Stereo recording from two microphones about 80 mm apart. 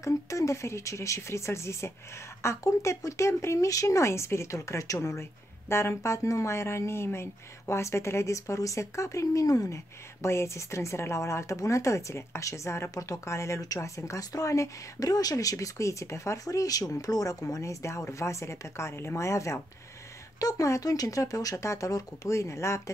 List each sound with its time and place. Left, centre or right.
0.0 s speech: left
10.2 s speech: left